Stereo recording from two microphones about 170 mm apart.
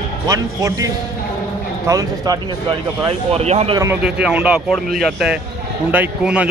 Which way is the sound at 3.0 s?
35° right (ahead or behind).